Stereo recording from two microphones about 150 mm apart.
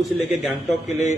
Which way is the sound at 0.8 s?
50° left (ahead or behind).